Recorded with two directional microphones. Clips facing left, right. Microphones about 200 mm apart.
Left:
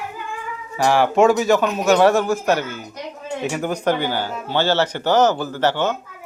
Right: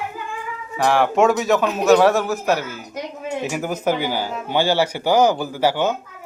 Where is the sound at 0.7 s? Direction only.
Centre (ahead or behind).